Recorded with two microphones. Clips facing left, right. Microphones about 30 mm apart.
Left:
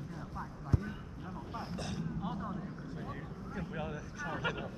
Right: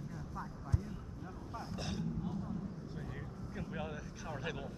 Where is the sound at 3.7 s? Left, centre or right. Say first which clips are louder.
Left 1 dB; centre.